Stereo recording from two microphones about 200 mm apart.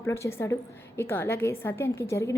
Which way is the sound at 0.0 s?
15° left (ahead or behind).